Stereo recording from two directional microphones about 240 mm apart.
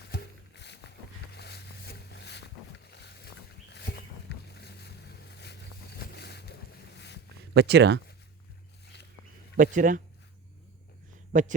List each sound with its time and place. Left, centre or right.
0.1 s a sound: left
4.5 s boat: left
7.5 s speech: right
9.6 s speech: right
11.3 s speech: right